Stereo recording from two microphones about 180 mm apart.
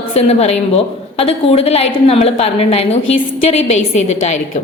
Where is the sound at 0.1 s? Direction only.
35° left (ahead or behind).